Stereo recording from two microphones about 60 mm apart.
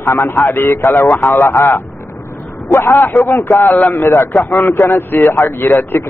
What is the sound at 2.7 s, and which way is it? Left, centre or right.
Speech, left.